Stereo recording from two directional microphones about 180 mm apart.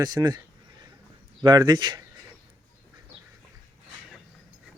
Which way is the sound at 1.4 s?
20° right (ahead or behind).